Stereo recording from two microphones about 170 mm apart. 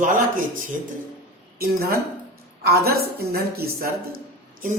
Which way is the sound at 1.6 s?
60° right (ahead or behind).